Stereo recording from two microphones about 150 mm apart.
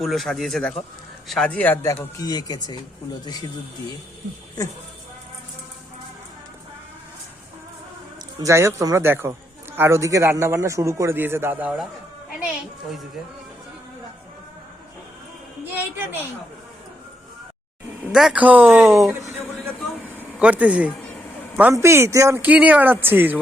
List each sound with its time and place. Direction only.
0.0 s speech: centre (ahead or behind); by 3.5 s 25° left (ahead or behind)
8.4 s a man's voice: 20° right (ahead or behind)
18.1 s speech: 5° right (ahead or behind)
20.4 s speech: 10° right (ahead or behind)